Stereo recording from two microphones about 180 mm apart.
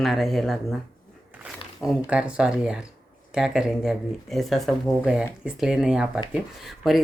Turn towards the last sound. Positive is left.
turn(degrees=0)  # may be behind; listen again after turning